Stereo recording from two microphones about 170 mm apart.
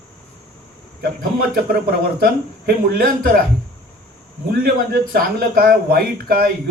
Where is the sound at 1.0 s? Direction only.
60° right (ahead or behind).